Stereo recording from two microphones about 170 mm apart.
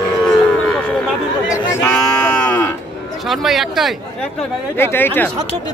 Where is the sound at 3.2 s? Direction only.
Centre (ahead or behind).